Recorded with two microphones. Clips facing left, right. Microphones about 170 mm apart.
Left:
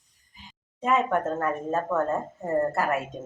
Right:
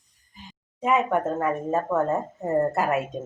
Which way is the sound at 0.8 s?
15° right (ahead or behind).